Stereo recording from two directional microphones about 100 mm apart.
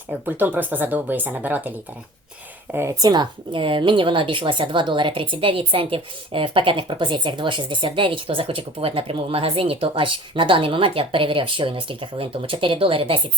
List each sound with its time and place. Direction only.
0.1 s speech: 15° right (ahead or behind)
3.0 s a woman's voice: 45° right (ahead or behind); by 13.1 s 65° right (ahead or behind)